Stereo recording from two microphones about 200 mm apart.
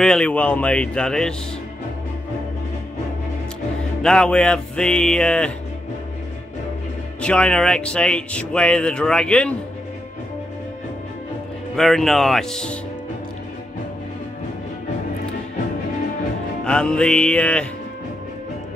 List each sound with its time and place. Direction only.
0.0 s speech: 5° left (ahead or behind)
4.0 s speech: 5° left (ahead or behind)
7.2 s speech: 5° left (ahead or behind)
11.7 s speech: centre (ahead or behind)
16.6 s speech: 5° left (ahead or behind)